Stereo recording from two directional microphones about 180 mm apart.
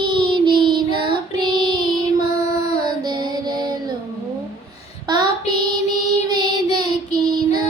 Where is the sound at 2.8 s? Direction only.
25° right (ahead or behind).